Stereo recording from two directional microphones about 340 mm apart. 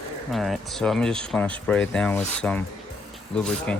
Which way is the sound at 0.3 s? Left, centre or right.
Centre.